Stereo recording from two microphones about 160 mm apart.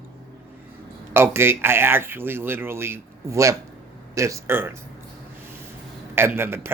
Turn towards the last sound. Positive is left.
turn(degrees=-15)  # may be behind; listen again after turning